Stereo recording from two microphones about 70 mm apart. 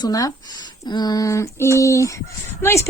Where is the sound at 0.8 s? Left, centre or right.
Left.